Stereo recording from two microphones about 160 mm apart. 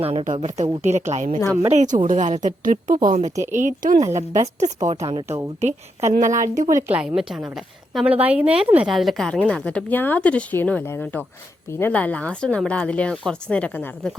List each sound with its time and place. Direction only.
0.0 s a woman's voice: 35° right (ahead or behind)
5.5 s a woman's voice: 45° right (ahead or behind)
6.7 s a woman's voice: 10° right (ahead or behind); by 14.1 s 10° left (ahead or behind)